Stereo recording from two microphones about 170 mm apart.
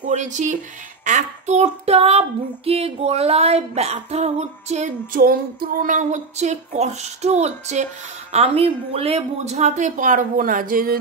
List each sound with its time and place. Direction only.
0.0 s speech: 45° right (ahead or behind)
1.0 s female singing: 45° right (ahead or behind)